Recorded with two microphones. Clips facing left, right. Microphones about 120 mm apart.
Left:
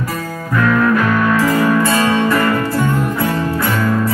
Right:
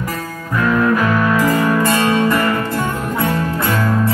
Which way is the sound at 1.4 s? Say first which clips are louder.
Left 1 dB; 15° right (ahead or behind).